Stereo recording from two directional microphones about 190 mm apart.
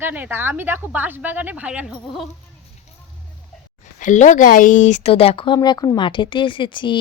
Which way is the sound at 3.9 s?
40° left (ahead or behind).